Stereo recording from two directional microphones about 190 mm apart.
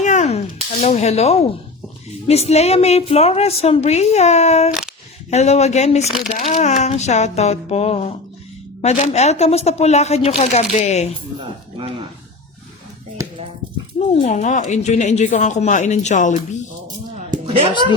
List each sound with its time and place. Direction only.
0.0 s a sound: 40° left (ahead or behind)
2.2 s a woman's voice: 35° left (ahead or behind)
4.7 s single-lens reflex camera: centre (ahead or behind)
5.3 s a woman's voice: 35° left (ahead or behind)
14.2 s a woman's voice: 40° left (ahead or behind)
17.3 s speech: 25° right (ahead or behind)